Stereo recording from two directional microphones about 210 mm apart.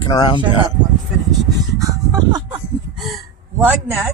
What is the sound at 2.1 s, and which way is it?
Music, 20° right (ahead or behind).